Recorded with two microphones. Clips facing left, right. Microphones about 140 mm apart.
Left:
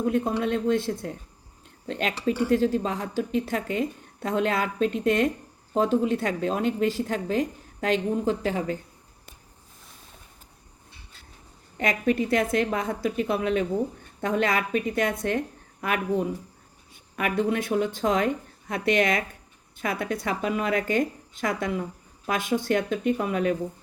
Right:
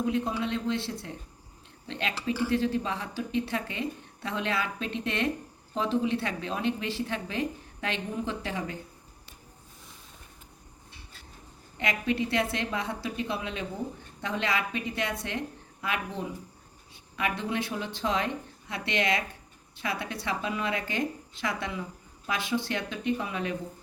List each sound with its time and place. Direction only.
0.0 s speech: 50° left (ahead or behind)
11.8 s speech: 45° left (ahead or behind)